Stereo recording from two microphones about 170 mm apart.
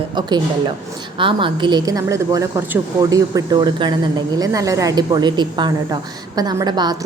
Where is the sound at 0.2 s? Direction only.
25° right (ahead or behind).